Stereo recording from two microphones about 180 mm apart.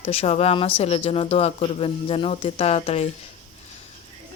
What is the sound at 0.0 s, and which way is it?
Speech, 35° left (ahead or behind).